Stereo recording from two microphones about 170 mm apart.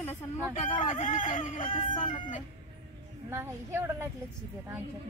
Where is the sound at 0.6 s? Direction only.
45° left (ahead or behind).